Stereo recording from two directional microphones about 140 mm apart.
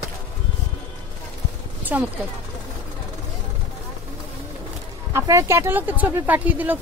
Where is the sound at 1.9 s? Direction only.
10° right (ahead or behind).